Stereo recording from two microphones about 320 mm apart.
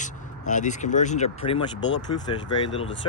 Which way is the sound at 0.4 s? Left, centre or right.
Left.